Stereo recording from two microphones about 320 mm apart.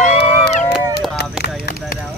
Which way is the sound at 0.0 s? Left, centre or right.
Left.